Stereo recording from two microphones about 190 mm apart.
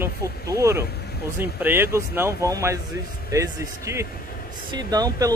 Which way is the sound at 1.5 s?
10° right (ahead or behind).